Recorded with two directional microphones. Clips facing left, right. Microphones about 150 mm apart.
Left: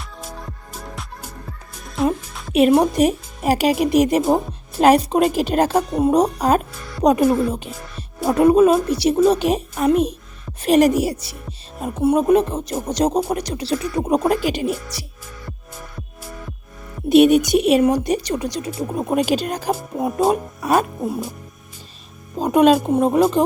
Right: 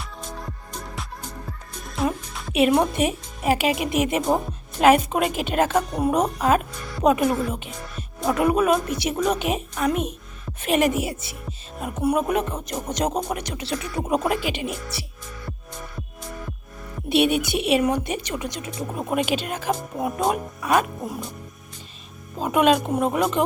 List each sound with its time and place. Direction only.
0.0 s music: centre (ahead or behind)
2.5 s a woman's voice: 40° left (ahead or behind)
4.2 s speech: 5° left (ahead or behind)
4.8 s a woman's voice: 35° left (ahead or behind)
17.1 s a woman's voice: 45° left (ahead or behind)
22.4 s a woman's voice: 35° left (ahead or behind)